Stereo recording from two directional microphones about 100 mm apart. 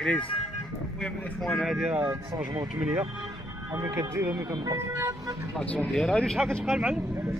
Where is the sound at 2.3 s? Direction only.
40° right (ahead or behind).